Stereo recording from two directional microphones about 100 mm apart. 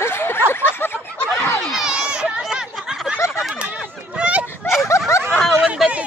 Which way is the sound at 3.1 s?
25° left (ahead or behind).